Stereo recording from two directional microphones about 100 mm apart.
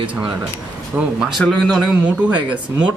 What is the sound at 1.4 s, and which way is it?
Speech, 5° left (ahead or behind).